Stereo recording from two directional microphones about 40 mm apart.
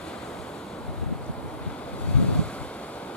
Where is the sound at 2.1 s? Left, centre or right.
Left.